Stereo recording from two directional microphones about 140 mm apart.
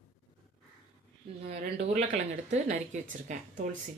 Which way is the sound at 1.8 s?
55° right (ahead or behind).